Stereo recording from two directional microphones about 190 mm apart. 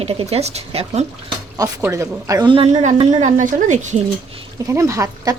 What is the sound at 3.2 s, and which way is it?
Speech, 40° right (ahead or behind).